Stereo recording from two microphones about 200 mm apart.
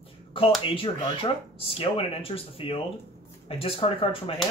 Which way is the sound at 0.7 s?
30° left (ahead or behind).